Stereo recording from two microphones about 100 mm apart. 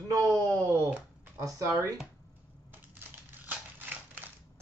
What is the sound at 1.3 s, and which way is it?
Speech, 30° right (ahead or behind).